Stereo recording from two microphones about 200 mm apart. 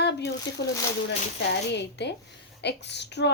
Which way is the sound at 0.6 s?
55° left (ahead or behind).